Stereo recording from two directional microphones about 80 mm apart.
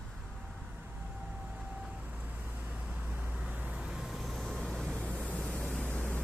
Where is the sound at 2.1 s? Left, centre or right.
Centre.